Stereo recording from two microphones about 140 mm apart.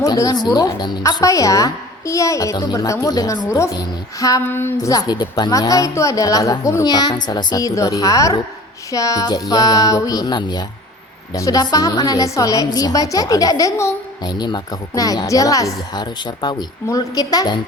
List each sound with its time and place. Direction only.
0.0 s a woman's voice: 25° left (ahead or behind)